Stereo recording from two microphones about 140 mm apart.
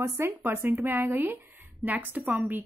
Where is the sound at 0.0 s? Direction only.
20° right (ahead or behind).